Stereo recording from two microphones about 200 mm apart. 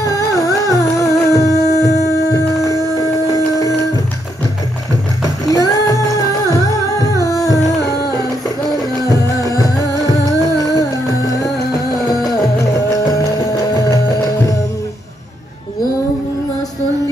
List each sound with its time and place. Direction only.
0.0 s music: 15° left (ahead or behind)
5.2 s music: 15° left (ahead or behind)